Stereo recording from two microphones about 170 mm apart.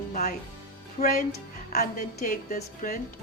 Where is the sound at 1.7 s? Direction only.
55° left (ahead or behind).